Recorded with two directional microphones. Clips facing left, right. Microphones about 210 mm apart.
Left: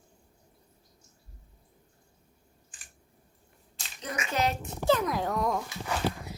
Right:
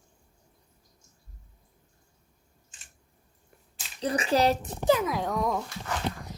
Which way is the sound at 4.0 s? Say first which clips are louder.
Right 6 dB; 35° right (ahead or behind).